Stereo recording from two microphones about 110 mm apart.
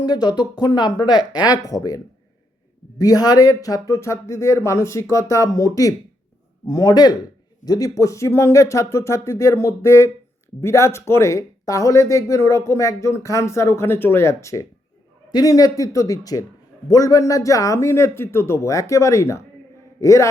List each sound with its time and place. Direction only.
0.0 s speech: 40° left (ahead or behind)
3.0 s speech: 35° left (ahead or behind)